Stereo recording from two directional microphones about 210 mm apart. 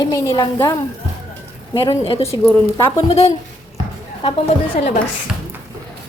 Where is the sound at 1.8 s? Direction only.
25° left (ahead or behind).